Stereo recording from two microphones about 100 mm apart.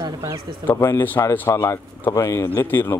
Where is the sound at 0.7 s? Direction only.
25° left (ahead or behind).